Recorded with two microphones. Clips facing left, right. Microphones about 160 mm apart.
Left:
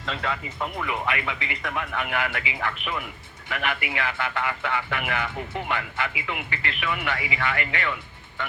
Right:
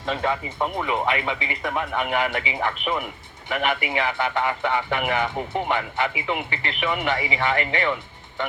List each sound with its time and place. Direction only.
0.0 s speech: 20° right (ahead or behind)
1.3 s speech: 55° right (ahead or behind)
1.9 s speech: 20° right (ahead or behind)